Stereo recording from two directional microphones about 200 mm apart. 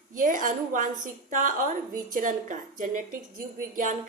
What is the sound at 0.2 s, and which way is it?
A woman's voice, 40° right (ahead or behind).